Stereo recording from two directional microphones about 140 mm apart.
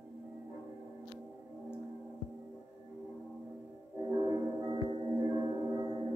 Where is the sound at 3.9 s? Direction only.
30° right (ahead or behind).